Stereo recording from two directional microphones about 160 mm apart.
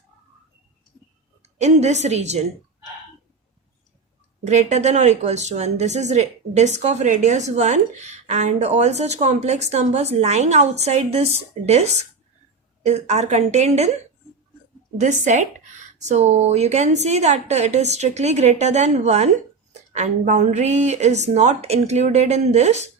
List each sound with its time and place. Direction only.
1.4 s a woman's voice: 45° right (ahead or behind)
4.4 s a woman's voice: 45° right (ahead or behind)